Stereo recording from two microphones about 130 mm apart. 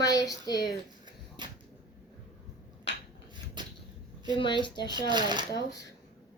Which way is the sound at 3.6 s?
35° right (ahead or behind).